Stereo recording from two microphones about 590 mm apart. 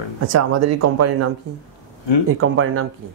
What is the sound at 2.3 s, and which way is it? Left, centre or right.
Speech, right.